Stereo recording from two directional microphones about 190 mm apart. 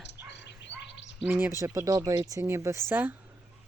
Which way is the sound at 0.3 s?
65° left (ahead or behind).